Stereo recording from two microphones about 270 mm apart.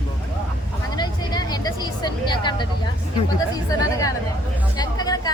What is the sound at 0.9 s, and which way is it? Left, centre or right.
Vehicle, centre.